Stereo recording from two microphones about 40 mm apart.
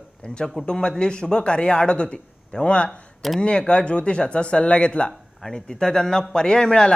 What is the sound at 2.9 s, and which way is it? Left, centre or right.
Speech, centre.